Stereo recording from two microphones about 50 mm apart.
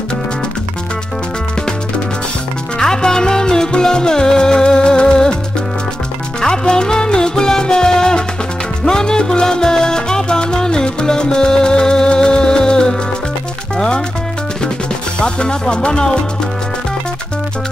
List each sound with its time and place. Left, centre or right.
2.8 s music: centre
6.4 s music: centre
8.8 s salsa music: centre
13.7 s music: centre
15.1 s music: centre